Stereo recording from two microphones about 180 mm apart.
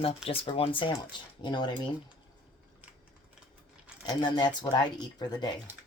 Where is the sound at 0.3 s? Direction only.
30° left (ahead or behind).